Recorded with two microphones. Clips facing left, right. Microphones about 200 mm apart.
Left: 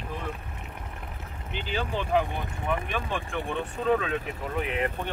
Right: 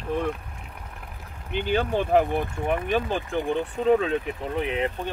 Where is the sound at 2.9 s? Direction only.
35° right (ahead or behind).